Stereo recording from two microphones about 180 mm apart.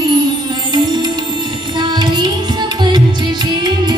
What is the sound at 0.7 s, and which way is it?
Music, 25° right (ahead or behind).